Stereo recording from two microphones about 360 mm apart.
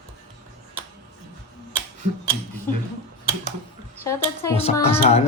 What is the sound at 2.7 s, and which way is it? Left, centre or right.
Speech, centre.